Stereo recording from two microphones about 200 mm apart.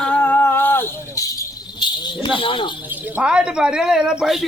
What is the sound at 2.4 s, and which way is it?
Speech, 25° left (ahead or behind).